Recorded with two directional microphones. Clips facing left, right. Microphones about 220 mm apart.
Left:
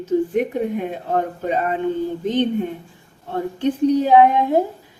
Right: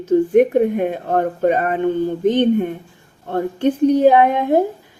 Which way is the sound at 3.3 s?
55° right (ahead or behind).